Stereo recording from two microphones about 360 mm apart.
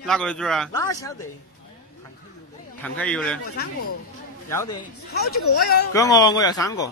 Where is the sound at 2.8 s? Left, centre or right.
Centre.